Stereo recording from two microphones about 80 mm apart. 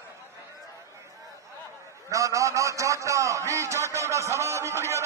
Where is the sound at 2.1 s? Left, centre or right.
Right.